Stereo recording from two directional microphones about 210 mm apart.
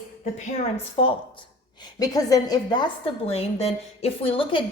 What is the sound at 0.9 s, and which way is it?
A woman's voice, 25° left (ahead or behind).